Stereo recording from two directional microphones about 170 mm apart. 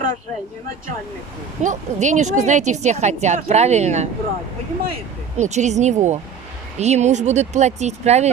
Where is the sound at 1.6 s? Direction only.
45° right (ahead or behind).